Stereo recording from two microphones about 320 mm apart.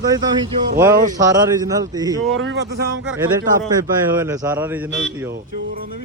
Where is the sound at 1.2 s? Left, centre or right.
Centre.